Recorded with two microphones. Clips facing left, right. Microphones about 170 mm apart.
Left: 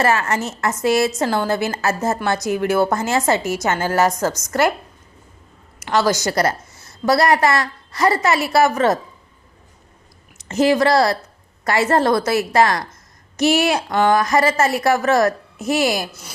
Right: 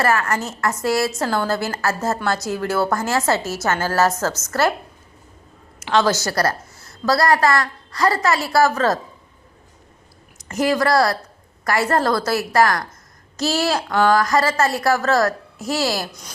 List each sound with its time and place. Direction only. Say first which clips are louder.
0.0 s a woman's voice: left 1 dB; 25° left (ahead or behind)
5.9 s a woman's voice: even; 10° left (ahead or behind)
10.3 s a woman's voice: left 4 dB; 25° left (ahead or behind)